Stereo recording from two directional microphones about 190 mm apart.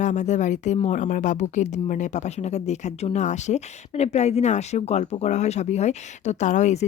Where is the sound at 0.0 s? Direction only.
40° left (ahead or behind).